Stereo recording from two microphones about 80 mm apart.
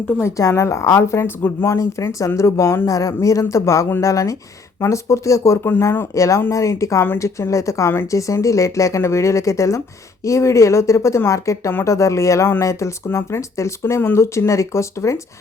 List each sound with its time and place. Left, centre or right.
0.2 s a woman's voice: left